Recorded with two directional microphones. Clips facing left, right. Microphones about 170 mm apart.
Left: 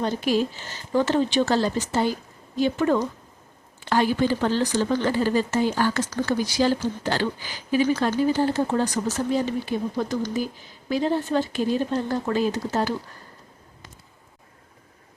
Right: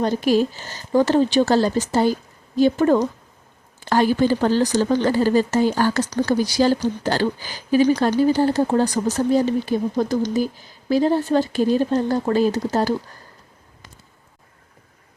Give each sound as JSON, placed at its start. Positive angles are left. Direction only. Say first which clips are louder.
{"t": 0.0, "sound": "speech", "louder": "right 5 dB", "side_deg": -40}